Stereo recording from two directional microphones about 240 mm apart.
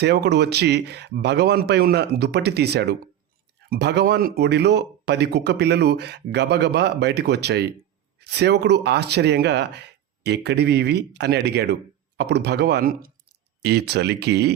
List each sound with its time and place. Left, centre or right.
0.0 s speech: right